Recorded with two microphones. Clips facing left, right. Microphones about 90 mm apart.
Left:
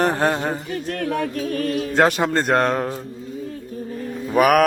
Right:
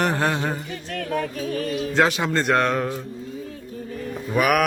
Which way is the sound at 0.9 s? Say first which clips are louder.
Left 1 dB; 65° left (ahead or behind).